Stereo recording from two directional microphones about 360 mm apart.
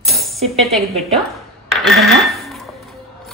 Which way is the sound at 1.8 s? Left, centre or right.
Centre.